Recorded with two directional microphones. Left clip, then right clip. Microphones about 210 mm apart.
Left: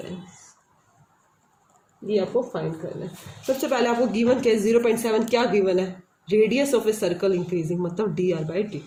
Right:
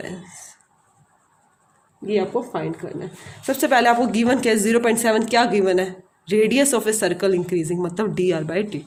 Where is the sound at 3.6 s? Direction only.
50° right (ahead or behind).